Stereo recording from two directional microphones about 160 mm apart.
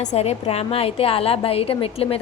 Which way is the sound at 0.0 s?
45° left (ahead or behind).